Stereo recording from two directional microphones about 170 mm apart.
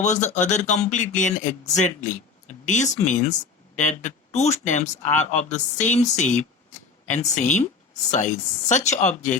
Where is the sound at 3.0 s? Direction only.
45° left (ahead or behind).